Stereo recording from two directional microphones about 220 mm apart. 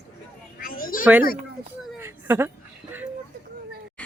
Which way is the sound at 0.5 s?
40° left (ahead or behind).